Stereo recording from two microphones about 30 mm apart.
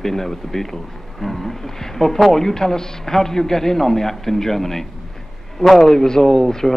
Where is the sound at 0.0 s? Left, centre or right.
Centre.